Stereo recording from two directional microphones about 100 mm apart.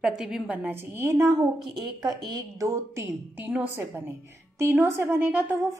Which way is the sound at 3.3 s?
15° right (ahead or behind).